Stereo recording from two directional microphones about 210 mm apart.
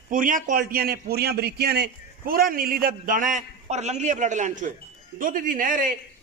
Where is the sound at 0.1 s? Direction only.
40° right (ahead or behind).